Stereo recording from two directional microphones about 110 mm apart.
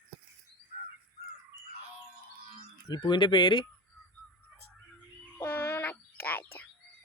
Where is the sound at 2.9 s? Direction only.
45° left (ahead or behind).